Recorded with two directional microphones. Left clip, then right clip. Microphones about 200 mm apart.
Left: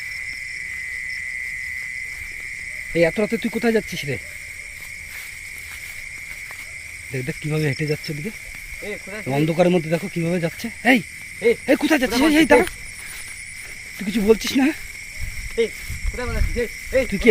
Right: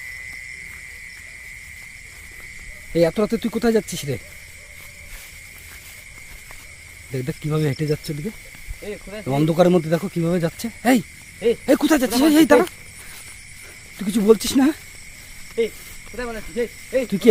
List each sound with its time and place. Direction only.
2.9 s speech: 15° right (ahead or behind)
7.1 s speech: 15° right (ahead or behind)
8.8 s speech: centre (ahead or behind)
9.2 s speech: 20° right (ahead or behind)
14.0 s speech: 20° right (ahead or behind)
16.1 s speech: centre (ahead or behind)